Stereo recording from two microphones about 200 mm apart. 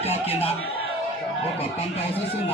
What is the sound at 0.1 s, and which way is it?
Music, 30° left (ahead or behind).